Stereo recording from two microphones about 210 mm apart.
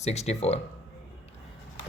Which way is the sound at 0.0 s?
30° left (ahead or behind).